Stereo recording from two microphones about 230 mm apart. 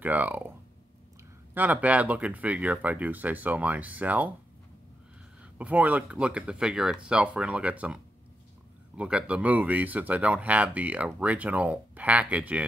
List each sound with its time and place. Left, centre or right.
0.0 s speech: centre
1.5 s speech: centre
5.6 s speech: centre